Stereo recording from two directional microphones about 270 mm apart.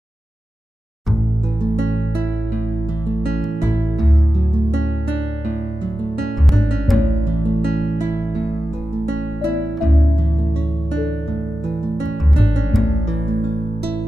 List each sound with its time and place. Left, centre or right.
6.5 s music: centre